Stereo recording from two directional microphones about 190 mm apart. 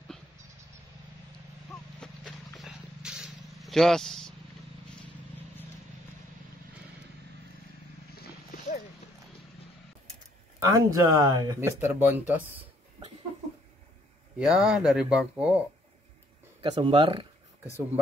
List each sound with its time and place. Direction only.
2.0 s wild animals: centre (ahead or behind)
8.2 s wild animals: 55° left (ahead or behind)
10.7 s speech: 15° right (ahead or behind)
14.4 s speech: centre (ahead or behind)
16.8 s speech: 30° right (ahead or behind)